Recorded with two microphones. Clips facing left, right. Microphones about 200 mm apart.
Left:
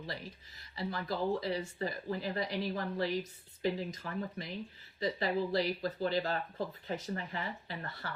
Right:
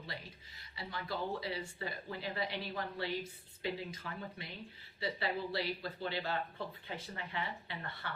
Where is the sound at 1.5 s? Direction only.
35° left (ahead or behind).